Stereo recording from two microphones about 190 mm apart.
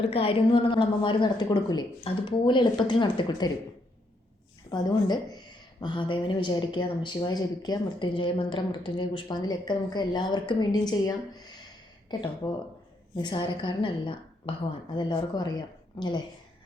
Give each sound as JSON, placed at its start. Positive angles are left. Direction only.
{"t": 0.1, "sound": "speech", "side_deg": 30}
{"t": 4.7, "sound": "speech", "side_deg": 20}
{"t": 12.1, "sound": "speech", "side_deg": 20}